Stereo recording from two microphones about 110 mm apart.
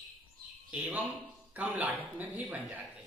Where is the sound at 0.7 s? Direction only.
15° right (ahead or behind).